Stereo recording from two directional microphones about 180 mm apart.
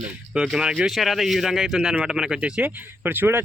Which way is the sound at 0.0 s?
5° right (ahead or behind).